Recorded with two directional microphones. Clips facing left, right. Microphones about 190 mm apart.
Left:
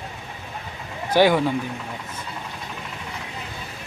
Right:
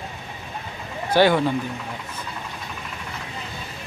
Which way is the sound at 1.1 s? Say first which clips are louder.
Even; 10° left (ahead or behind).